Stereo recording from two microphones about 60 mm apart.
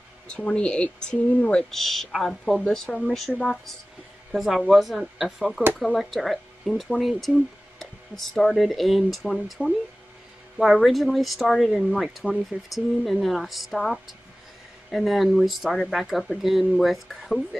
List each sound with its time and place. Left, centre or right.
0.3 s speech: centre
1.7 s speech: centre
4.3 s speech: centre